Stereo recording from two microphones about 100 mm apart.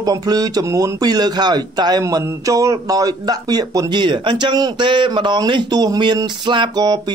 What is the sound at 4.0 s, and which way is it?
Speech, 55° right (ahead or behind).